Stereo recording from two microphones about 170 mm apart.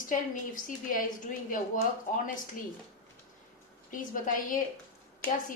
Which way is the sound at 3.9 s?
50° left (ahead or behind).